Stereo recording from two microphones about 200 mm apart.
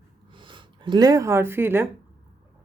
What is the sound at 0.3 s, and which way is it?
Speech, 25° right (ahead or behind).